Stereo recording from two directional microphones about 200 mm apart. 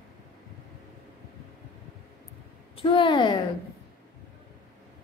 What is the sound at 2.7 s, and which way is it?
Speech, 25° left (ahead or behind).